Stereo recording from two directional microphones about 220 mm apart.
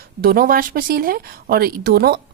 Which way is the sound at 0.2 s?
40° right (ahead or behind).